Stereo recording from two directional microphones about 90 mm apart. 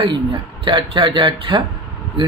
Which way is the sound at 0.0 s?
65° right (ahead or behind).